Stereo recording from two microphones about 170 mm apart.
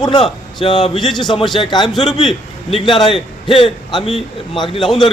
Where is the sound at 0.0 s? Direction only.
30° left (ahead or behind).